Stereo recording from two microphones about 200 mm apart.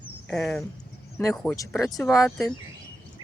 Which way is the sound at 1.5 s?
15° left (ahead or behind).